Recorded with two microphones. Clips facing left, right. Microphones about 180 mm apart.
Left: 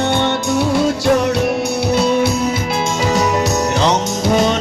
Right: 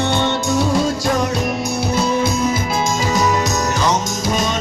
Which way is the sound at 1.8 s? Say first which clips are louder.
Left 3 dB; 70° left (ahead or behind).